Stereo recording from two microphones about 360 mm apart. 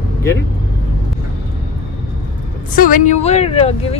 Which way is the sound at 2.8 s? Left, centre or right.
Left.